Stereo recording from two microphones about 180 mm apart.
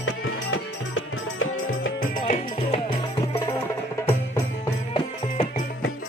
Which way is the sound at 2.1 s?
50° left (ahead or behind).